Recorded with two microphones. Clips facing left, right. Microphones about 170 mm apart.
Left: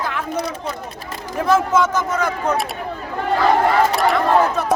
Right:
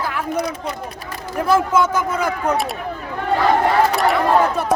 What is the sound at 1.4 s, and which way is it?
A man's voice, 10° right (ahead or behind).